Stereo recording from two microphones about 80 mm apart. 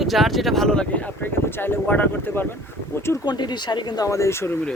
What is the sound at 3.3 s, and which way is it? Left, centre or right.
Speech, left.